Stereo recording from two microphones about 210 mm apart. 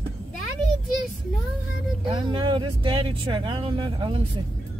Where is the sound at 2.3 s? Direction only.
25° right (ahead or behind).